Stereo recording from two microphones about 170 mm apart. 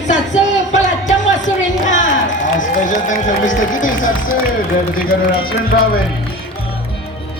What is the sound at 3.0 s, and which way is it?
Speech, 50° left (ahead or behind).